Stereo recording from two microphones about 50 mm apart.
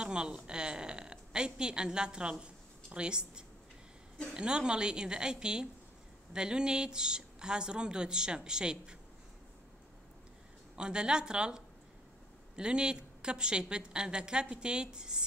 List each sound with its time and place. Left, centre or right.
0.0 s a woman's voice: centre
10.8 s a woman's voice: centre